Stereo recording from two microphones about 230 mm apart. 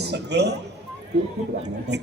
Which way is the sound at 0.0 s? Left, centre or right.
Right.